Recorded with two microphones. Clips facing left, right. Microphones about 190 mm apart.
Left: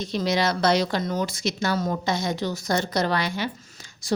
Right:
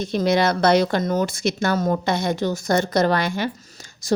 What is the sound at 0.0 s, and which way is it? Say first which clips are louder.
A woman's voice: right 5 dB; 55° right (ahead or behind).